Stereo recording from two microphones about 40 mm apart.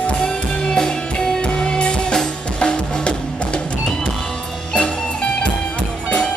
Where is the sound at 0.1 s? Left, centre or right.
Left.